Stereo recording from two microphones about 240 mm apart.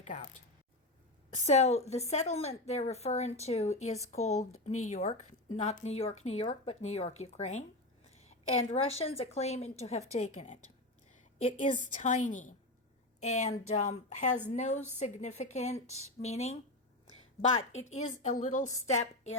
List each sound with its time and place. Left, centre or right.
0.0 s speech: left
1.5 s a woman's voice: left
17.5 s a woman's voice: left